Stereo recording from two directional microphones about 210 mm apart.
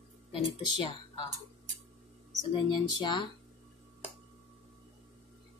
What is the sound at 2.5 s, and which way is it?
Speech, 20° left (ahead or behind).